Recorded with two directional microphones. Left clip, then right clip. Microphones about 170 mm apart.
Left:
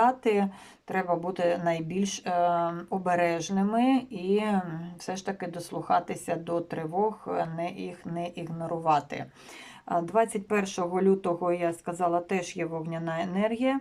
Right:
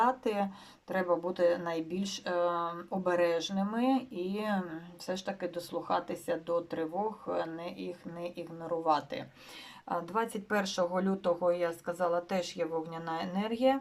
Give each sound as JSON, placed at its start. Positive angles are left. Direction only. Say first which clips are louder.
{"t": 0.0, "sound": "speech", "louder": "left 5 dB", "side_deg": 15}